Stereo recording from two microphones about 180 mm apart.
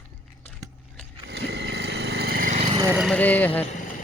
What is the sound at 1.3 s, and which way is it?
Vehicle, 70° right (ahead or behind).